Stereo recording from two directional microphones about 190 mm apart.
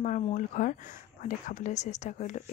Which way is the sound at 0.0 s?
40° left (ahead or behind).